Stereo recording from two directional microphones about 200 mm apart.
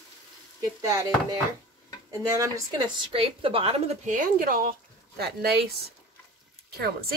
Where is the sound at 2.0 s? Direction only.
15° right (ahead or behind); by 5.6 s 55° right (ahead or behind).